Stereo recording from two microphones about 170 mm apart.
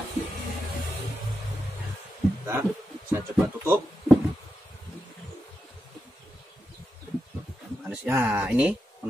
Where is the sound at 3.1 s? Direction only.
15° right (ahead or behind).